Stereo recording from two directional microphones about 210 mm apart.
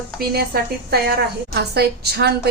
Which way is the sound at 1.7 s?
50° right (ahead or behind).